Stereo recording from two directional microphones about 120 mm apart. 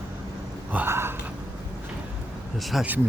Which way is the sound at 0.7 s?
20° right (ahead or behind).